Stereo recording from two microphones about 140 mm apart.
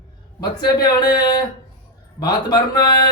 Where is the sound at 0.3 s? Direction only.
30° left (ahead or behind).